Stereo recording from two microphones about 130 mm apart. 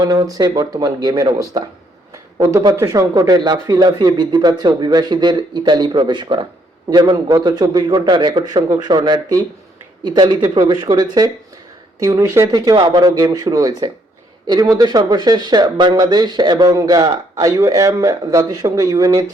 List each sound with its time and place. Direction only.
0.0 s speech: 30° right (ahead or behind)
7.3 s speech: 30° right (ahead or behind)